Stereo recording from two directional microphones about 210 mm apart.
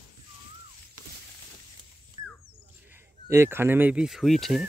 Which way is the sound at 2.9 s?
10° right (ahead or behind).